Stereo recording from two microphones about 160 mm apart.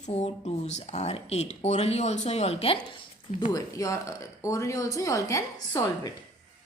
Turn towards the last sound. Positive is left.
turn(degrees=25)  # may be behind; listen again after turning